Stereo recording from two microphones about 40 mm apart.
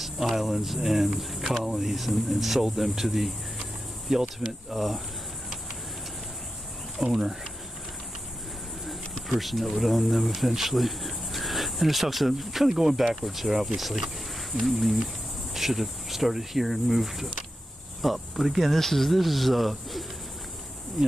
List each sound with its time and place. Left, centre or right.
0.0 s speech: centre
7.0 s speech: centre
9.4 s speech: centre
18.8 s speech: centre